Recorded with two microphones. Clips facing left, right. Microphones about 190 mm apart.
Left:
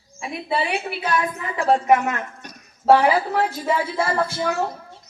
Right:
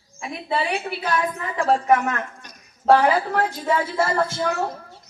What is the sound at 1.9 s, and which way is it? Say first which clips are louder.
A woman's voice: left 1 dB; 15° left (ahead or behind).